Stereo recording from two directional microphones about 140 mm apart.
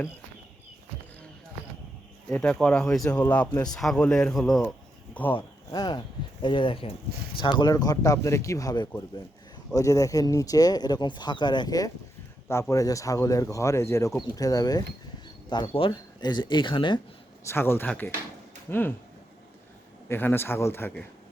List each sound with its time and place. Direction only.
2.3 s a man's voice: 5° left (ahead or behind)
5.3 s speech: 30° left (ahead or behind)
15.6 s speech: 40° left (ahead or behind)
17.4 s a man's voice: 15° left (ahead or behind)
20.1 s a man's voice: 15° left (ahead or behind)